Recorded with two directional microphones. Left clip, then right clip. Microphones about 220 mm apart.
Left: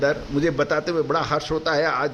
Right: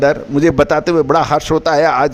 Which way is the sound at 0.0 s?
45° right (ahead or behind).